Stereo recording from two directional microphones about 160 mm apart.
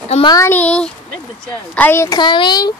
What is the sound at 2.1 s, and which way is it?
Speech, 30° left (ahead or behind).